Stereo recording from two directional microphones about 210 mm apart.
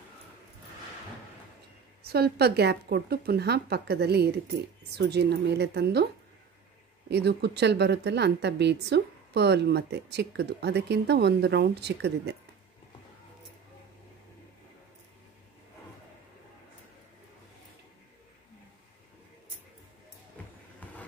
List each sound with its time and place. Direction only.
2.0 s a woman's voice: 50° right (ahead or behind)
7.1 s a woman's voice: 55° right (ahead or behind)
20.8 s a sound: 5° left (ahead or behind)